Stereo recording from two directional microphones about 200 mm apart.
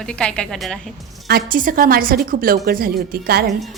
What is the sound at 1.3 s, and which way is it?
A woman's voice, 45° right (ahead or behind).